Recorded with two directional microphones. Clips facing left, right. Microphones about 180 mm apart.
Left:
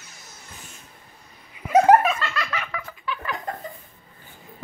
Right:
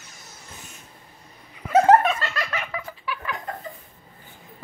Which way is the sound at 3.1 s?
10° right (ahead or behind).